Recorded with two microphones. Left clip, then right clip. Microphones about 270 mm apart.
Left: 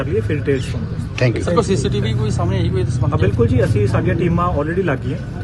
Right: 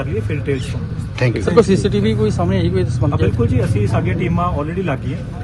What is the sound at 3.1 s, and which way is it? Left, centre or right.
A man's voice, centre.